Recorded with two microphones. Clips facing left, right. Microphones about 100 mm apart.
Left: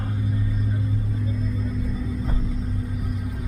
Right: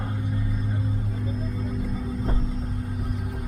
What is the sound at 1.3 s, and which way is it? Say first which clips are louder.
Music: even; 40° right (ahead or behind).